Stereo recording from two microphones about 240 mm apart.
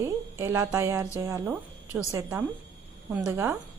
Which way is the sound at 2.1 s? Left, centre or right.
Centre.